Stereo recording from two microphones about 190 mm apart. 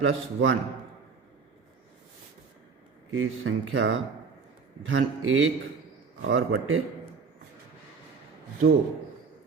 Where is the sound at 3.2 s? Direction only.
90° right.